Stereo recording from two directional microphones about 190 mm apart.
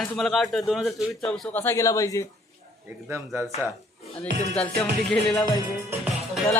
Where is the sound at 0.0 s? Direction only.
Centre (ahead or behind); by 2.2 s 15° left (ahead or behind).